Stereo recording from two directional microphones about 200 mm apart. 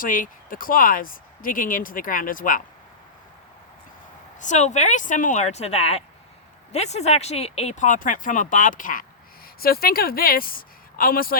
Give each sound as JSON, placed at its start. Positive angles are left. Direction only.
{"t": 0.0, "sound": "speech", "side_deg": 45}
{"t": 4.4, "sound": "a woman's voice", "side_deg": 35}